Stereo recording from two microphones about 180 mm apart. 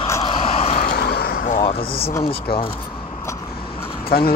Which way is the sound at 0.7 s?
55° left (ahead or behind).